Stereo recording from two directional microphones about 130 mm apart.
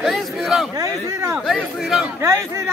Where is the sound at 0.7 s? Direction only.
20° right (ahead or behind).